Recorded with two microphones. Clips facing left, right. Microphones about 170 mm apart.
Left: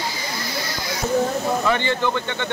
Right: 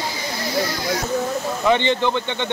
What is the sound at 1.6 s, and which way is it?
Speech, 20° right (ahead or behind).